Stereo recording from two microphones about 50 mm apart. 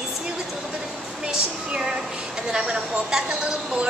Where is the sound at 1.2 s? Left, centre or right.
Centre.